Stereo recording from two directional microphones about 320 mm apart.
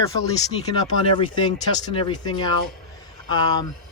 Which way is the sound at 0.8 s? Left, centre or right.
Centre.